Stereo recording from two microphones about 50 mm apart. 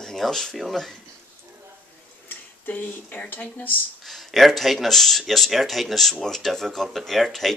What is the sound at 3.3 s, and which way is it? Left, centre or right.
Speech, left.